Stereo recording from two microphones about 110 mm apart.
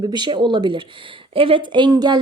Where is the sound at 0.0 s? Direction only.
40° right (ahead or behind).